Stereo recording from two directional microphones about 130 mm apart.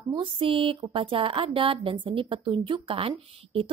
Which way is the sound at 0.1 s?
40° right (ahead or behind).